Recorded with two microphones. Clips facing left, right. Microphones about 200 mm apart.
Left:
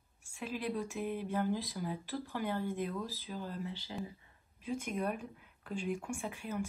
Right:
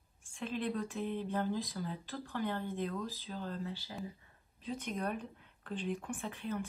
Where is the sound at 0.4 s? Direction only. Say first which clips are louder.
Right 1 dB; 10° left (ahead or behind).